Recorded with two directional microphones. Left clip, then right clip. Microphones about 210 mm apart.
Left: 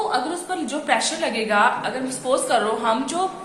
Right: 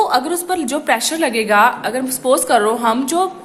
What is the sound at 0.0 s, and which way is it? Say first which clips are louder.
A woman's voice: right 7 dB; 45° right (ahead or behind).